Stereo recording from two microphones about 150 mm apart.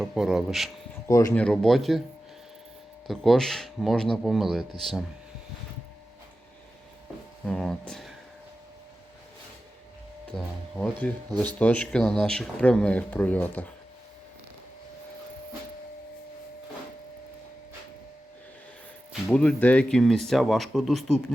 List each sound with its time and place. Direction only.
0.0 s speech: centre (ahead or behind)
1.0 s speech: 20° left (ahead or behind)
1.3 s speech: 5° left (ahead or behind)
3.1 s speech: centre (ahead or behind)
7.4 s speech: 5° left (ahead or behind)
10.3 s speech: 5° left (ahead or behind)
19.3 s speech: 5° left (ahead or behind)